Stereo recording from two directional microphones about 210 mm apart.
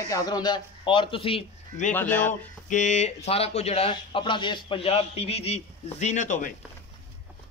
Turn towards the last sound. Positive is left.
turn(degrees=35)  # may be behind; listen again after turning